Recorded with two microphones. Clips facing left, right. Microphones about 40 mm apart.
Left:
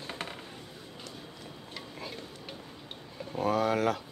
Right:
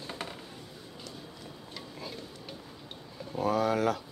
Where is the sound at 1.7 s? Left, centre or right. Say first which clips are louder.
Left 1 dB; left.